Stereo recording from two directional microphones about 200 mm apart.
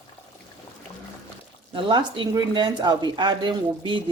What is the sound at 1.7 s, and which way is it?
A woman's voice, 25° right (ahead or behind).